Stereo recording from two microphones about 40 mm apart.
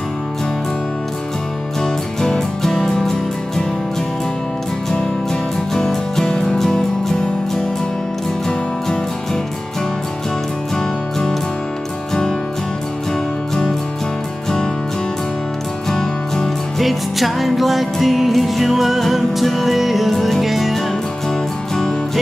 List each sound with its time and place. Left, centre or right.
2.2 s music: centre
4.9 s music: centre
15.9 s music: centre
16.8 s music: centre